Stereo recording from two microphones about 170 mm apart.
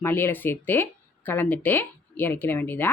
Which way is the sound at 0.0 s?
15° left (ahead or behind).